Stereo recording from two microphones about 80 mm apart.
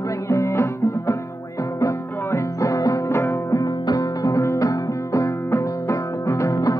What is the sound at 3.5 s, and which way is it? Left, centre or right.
Music, left.